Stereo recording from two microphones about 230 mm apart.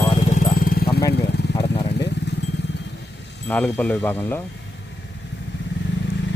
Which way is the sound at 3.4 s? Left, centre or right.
Centre.